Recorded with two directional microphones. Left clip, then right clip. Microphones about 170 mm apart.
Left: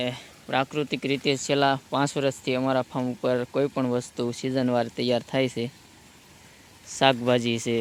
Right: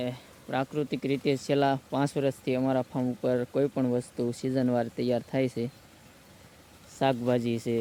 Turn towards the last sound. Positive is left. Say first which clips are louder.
# left 4 dB
turn(degrees=0)  # may be behind; listen again after turning